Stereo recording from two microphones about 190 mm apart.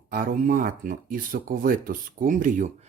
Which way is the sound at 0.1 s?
45° right (ahead or behind).